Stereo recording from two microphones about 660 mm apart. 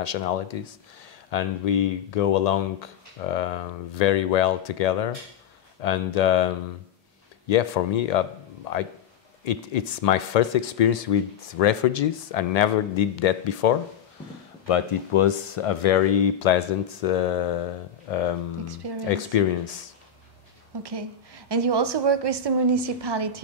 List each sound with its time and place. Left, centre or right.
0.0 s speech: left
14.7 s speech: left
20.7 s a woman's voice: right